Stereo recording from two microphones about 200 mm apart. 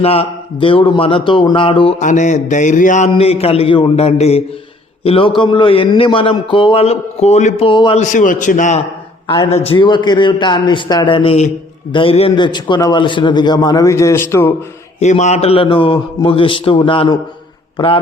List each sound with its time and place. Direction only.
0.0 s speech: 30° left (ahead or behind)
8.0 s a man's voice: 40° left (ahead or behind)
9.2 s speech: 25° left (ahead or behind)
14.9 s speech: 35° left (ahead or behind)